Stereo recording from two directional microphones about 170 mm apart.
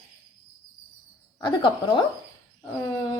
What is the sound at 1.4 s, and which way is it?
Speech, 30° left (ahead or behind).